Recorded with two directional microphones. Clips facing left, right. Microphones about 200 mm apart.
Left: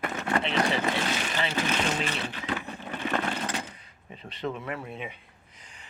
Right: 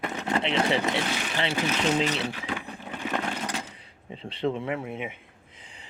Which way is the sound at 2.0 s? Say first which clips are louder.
Right 5 dB; 15° right (ahead or behind).